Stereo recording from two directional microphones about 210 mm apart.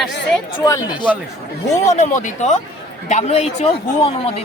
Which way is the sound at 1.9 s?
35° left (ahead or behind).